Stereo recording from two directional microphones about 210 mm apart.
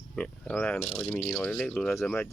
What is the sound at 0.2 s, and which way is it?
Speech, 5° left (ahead or behind).